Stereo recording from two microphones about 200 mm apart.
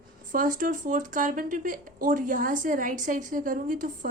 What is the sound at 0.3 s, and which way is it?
A woman's voice, 40° right (ahead or behind).